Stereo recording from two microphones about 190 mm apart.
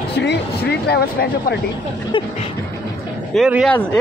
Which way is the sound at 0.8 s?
60° left (ahead or behind).